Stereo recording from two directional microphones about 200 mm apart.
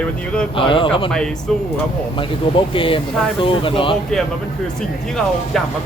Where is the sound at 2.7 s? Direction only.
25° left (ahead or behind).